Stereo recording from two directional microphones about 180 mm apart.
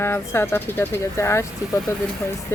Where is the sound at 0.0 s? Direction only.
15° left (ahead or behind).